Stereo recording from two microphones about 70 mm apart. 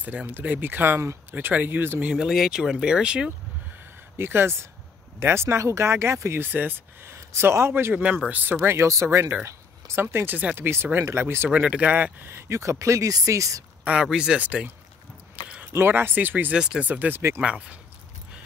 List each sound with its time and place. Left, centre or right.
0.0 s speech: right
2.0 s speech: centre
4.2 s speech: right
7.9 s speech: centre; by 9.3 s right
9.5 s a sound: right
10.3 s speech: right
11.5 s speech: centre
12.3 s speech: right
14.1 s speech: centre
15.9 s speech: right